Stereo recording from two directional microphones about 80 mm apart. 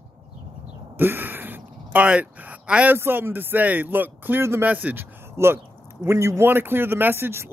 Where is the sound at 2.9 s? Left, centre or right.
Right.